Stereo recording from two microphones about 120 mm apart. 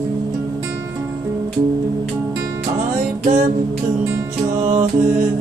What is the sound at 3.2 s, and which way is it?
Music, 90° right.